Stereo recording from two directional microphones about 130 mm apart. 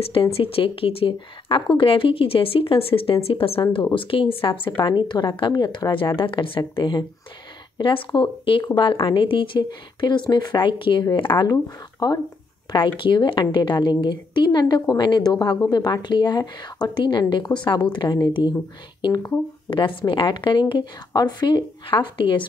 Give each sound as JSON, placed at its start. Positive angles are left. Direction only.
{"t": 0.0, "sound": "a woman's voice", "side_deg": 45}